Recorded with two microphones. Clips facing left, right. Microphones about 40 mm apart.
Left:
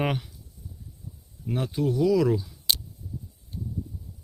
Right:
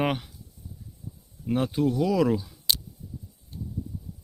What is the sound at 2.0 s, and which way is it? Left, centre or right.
Speech, right.